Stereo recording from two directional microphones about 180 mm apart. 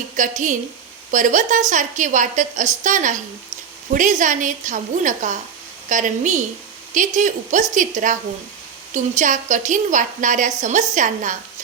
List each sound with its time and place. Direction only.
0.2 s a woman's voice: 45° right (ahead or behind)